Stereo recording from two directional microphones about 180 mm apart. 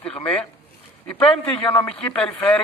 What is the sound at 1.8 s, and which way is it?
Speech, 5° left (ahead or behind).